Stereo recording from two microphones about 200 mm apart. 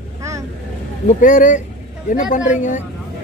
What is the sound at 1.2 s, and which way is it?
A woman's voice, 40° left (ahead or behind).